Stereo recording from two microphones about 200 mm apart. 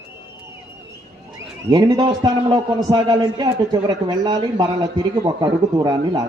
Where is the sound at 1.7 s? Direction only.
20° right (ahead or behind).